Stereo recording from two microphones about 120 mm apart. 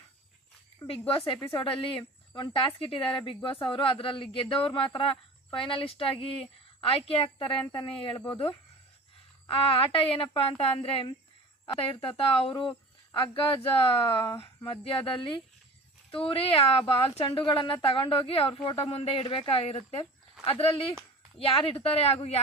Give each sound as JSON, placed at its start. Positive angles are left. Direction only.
{"t": 0.9, "sound": "a man's voice", "side_deg": 50}